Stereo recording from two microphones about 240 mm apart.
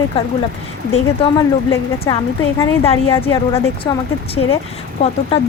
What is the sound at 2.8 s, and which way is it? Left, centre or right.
Speech, left.